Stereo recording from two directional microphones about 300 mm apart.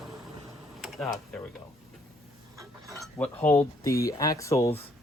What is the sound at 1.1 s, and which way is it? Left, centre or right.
Speech, centre.